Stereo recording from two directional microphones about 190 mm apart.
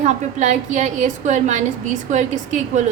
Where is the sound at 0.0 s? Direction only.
40° right (ahead or behind).